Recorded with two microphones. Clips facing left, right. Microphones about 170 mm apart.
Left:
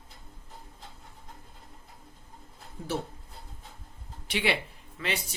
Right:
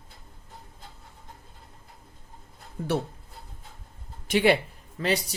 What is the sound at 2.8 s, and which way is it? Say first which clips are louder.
Speech: right 6 dB; 65° right (ahead or behind).